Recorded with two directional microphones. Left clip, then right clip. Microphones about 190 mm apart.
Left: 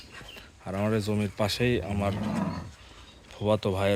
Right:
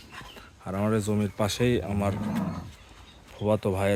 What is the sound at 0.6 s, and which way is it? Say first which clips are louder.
Speech: right 1 dB; 10° right (ahead or behind).